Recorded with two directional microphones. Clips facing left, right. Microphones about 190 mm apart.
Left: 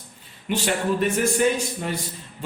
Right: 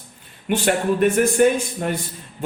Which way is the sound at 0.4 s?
55° right (ahead or behind).